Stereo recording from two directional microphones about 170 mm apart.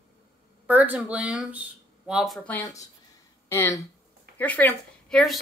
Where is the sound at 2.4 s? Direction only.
15° left (ahead or behind).